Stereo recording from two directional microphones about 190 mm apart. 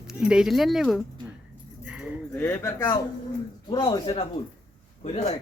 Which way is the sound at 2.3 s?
10° left (ahead or behind).